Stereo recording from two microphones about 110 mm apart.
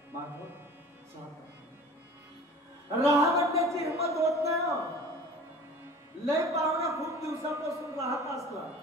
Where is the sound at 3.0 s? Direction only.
30° right (ahead or behind).